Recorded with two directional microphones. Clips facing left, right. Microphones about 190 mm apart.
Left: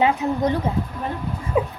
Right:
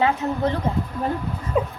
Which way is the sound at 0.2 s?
15° left (ahead or behind).